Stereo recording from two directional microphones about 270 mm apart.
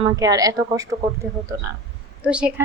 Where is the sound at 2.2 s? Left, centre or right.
Centre.